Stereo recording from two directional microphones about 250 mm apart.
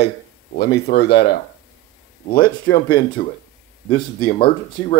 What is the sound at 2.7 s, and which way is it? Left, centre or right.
Speech, centre.